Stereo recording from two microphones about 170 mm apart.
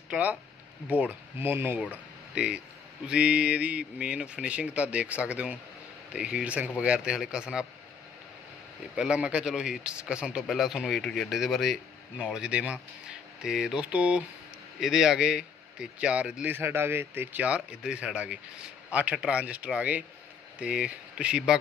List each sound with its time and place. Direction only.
0.1 s speech: 10° right (ahead or behind)
8.9 s speech: 5° right (ahead or behind)